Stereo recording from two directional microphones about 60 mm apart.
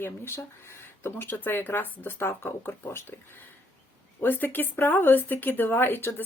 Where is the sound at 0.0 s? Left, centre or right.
Left.